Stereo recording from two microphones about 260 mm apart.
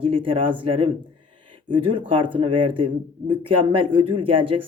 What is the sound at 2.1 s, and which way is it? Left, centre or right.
Speech, centre.